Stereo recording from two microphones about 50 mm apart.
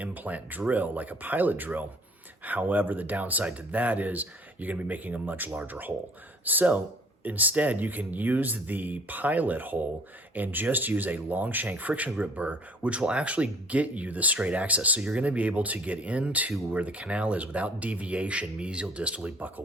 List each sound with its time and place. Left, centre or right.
0.0 s speech: right